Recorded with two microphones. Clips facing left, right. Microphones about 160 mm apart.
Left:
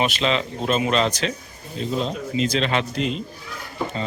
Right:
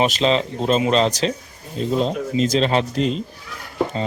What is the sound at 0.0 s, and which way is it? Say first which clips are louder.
Speech: right 4 dB; 35° right (ahead or behind).